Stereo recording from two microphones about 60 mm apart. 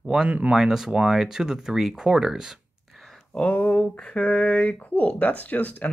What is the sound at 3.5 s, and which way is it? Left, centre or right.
Speech, left.